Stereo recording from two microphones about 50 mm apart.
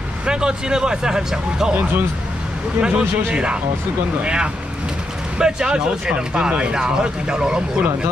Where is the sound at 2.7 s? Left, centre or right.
Centre.